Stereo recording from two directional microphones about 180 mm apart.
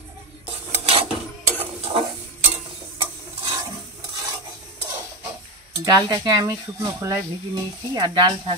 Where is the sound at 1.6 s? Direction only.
35° right (ahead or behind).